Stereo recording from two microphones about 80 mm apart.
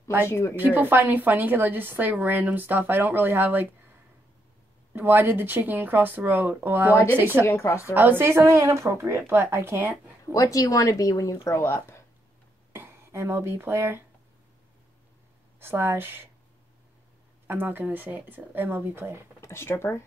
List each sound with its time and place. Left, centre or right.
0.3 s speech: left
0.7 s a woman's voice: right
4.9 s a woman's voice: right
7.4 s speech: left
7.9 s speech: right
10.3 s speech: left
12.7 s speech: right
15.6 s a woman's voice: right
17.5 s a woman's voice: right
19.4 s speech: left